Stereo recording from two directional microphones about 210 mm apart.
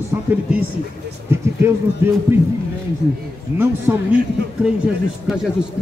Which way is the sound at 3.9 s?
10° right (ahead or behind).